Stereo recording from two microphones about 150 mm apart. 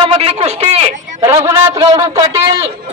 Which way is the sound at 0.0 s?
40° right (ahead or behind).